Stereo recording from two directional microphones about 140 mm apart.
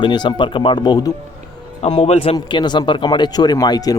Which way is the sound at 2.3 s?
35° left (ahead or behind).